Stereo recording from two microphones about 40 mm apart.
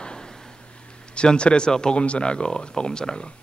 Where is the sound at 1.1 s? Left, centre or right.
Left.